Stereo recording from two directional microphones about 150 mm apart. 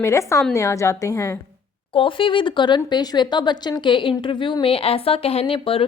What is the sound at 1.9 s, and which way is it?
Speech, 35° left (ahead or behind).